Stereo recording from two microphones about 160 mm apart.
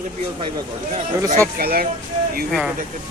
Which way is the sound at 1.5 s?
70° right (ahead or behind).